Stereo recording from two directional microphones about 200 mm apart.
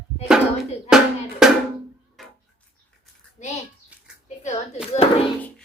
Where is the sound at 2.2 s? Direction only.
Centre (ahead or behind).